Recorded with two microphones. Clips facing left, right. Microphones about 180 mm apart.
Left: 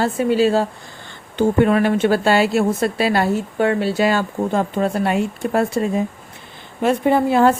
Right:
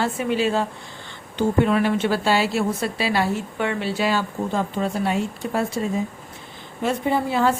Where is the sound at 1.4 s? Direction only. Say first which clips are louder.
Left 4 dB; 50° left (ahead or behind).